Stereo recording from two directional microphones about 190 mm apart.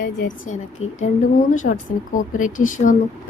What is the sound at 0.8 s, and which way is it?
A woman's voice, 35° left (ahead or behind).